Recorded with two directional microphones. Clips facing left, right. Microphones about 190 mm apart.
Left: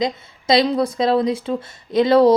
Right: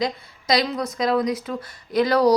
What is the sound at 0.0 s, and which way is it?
Speech, 25° left (ahead or behind).